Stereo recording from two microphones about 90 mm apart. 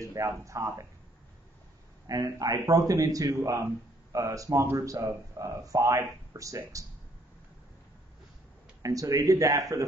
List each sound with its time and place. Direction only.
0.0 s speech: 35° right (ahead or behind)
2.0 s speech: 40° right (ahead or behind)
8.8 s speech: 40° right (ahead or behind)